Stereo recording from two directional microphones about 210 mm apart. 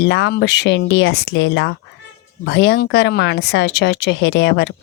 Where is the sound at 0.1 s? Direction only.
55° left (ahead or behind).